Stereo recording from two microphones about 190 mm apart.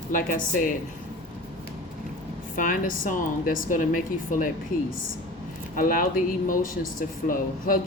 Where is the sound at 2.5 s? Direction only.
45° left (ahead or behind).